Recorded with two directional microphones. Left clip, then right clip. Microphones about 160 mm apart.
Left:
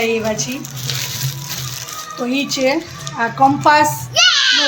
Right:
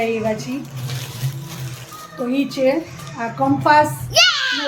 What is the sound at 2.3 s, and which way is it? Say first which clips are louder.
Speech: left 1 dB; 25° left (ahead or behind).